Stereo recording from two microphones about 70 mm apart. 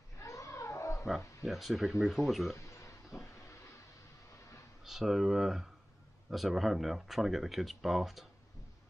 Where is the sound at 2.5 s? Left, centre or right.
Left.